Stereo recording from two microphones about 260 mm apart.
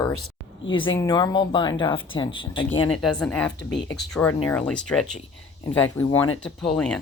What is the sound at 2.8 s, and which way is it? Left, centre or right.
Speech, centre.